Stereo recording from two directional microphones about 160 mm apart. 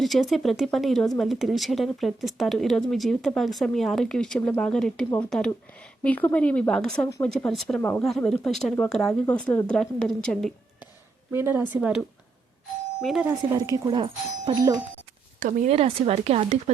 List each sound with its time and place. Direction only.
0.0 s a woman's voice: centre (ahead or behind)
7.8 s a woman's voice: 15° left (ahead or behind)
8.0 s speech: centre (ahead or behind)
11.3 s speech: 15° right (ahead or behind)
13.6 s speech: 25° right (ahead or behind)
15.4 s speech: 55° right (ahead or behind)